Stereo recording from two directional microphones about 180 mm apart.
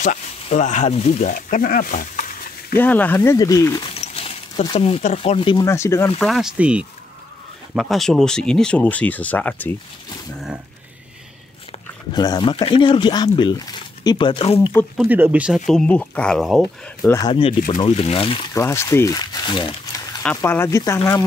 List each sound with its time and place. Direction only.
0.0 s speech: 40° left (ahead or behind)
2.7 s speech: 10° left (ahead or behind)
3.9 s speech: 35° left (ahead or behind)
5.7 s speech: 15° left (ahead or behind)
6.2 s speech: centre (ahead or behind)
12.1 s speech: 25° left (ahead or behind)
15.0 s speech: 10° right (ahead or behind)
17.1 s speech: 25° left (ahead or behind)
18.5 s speech: 15° left (ahead or behind)
20.3 s speech: 15° left (ahead or behind)